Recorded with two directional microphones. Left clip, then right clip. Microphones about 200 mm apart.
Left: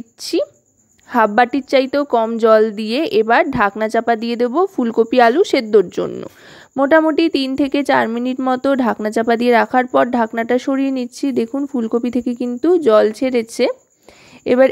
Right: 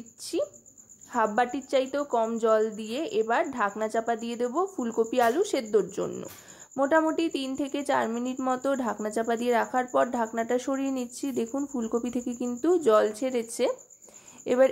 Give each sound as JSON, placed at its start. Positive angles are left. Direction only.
{"t": 0.2, "sound": "a woman's voice", "side_deg": 40}